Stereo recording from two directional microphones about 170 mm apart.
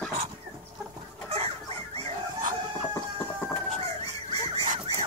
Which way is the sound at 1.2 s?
40° right (ahead or behind).